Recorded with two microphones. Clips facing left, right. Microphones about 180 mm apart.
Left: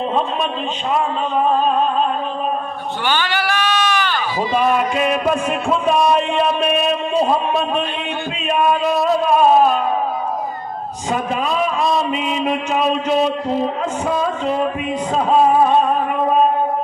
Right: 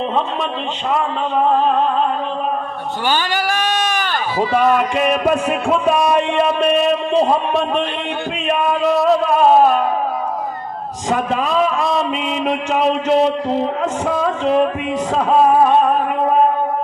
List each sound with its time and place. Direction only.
3.1 s bleat: 40° right (ahead or behind)
11.1 s a man's voice: 70° right (ahead or behind)
14.2 s a sound: 65° right (ahead or behind)